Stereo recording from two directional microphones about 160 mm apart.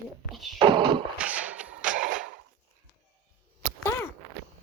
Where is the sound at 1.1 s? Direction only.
10° right (ahead or behind).